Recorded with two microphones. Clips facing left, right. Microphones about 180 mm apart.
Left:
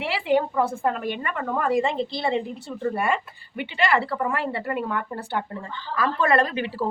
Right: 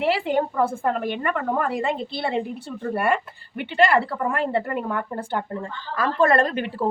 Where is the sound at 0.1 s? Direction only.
50° right (ahead or behind).